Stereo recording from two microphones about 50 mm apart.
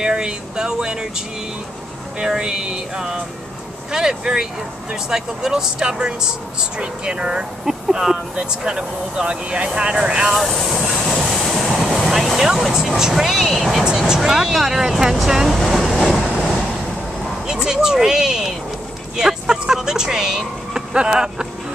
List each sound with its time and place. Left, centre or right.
0.0 s speech: centre
2.1 s speech: centre
10.3 s speech: centre
15.2 s vehicle: centre
17.5 s a sound: centre
19.1 s speech: centre